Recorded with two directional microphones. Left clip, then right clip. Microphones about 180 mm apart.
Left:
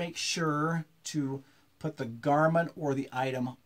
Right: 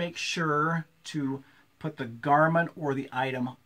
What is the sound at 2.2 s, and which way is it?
Speech, 35° left (ahead or behind).